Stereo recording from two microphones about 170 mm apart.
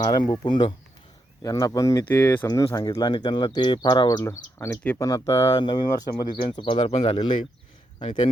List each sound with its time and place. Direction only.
0.2 s speech: 25° left (ahead or behind)
2.6 s speech: 25° left (ahead or behind)